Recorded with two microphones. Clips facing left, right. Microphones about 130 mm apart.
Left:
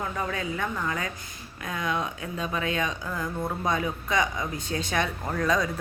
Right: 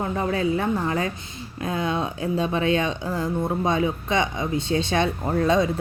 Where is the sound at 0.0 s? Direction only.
30° right (ahead or behind).